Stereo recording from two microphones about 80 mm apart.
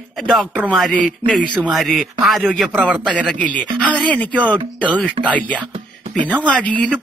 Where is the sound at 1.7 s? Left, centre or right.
Centre.